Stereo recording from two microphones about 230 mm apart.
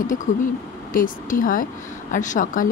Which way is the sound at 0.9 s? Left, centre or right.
Left.